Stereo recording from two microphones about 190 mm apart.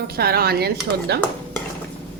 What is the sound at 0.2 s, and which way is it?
A woman's voice, 55° right (ahead or behind).